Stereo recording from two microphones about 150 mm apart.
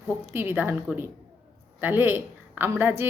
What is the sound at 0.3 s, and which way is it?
A woman's voice, 15° right (ahead or behind).